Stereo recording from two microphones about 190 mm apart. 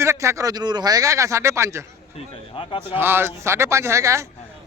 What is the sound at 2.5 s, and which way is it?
Speech, 30° left (ahead or behind).